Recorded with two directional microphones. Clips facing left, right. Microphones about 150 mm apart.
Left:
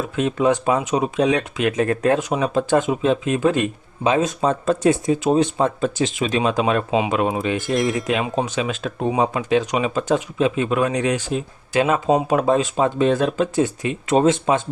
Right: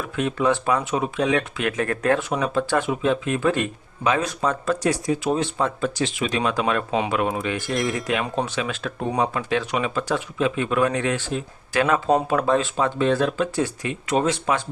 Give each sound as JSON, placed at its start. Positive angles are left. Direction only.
{"t": 0.0, "sound": "speech", "side_deg": 25}